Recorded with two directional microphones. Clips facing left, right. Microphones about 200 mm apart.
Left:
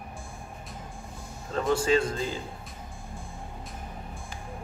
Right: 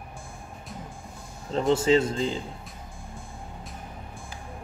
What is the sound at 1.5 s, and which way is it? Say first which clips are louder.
Speech: right 3 dB; 20° right (ahead or behind).